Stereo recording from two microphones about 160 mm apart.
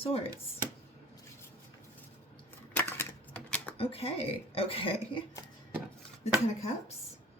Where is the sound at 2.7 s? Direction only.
15° left (ahead or behind).